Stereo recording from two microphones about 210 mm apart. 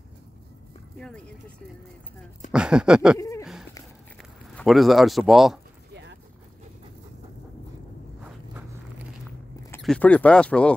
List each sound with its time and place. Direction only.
0.9 s speech: 5° left (ahead or behind)
2.5 s speech: 5° right (ahead or behind)
3.2 s speech: 15° left (ahead or behind)
4.2 s speech: centre (ahead or behind)
9.8 s speech: 5° left (ahead or behind)